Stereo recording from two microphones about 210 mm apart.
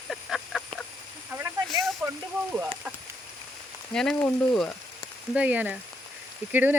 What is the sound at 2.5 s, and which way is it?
Speech, 5° right (ahead or behind).